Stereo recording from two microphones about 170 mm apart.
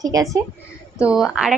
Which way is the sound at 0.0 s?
20° right (ahead or behind).